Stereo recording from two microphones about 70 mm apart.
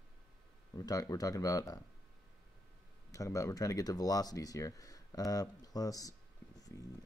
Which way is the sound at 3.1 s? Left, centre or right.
Left.